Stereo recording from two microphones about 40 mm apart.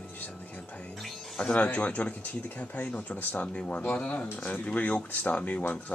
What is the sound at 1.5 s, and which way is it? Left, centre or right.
Speech, left.